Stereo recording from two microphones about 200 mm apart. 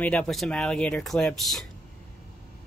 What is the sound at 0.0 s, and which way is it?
Speech, 5° left (ahead or behind).